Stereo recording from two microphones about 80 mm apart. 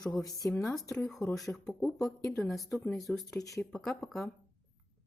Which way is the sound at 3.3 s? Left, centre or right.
Left.